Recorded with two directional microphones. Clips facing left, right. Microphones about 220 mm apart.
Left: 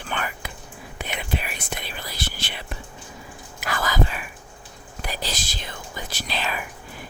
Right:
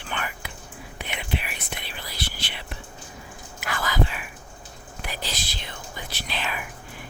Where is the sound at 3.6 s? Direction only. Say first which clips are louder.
Left 2 dB; 40° left (ahead or behind).